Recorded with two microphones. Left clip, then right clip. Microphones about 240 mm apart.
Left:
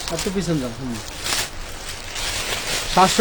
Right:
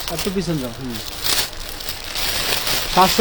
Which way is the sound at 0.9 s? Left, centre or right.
Right.